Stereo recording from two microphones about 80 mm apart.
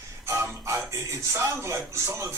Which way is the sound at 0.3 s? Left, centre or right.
Right.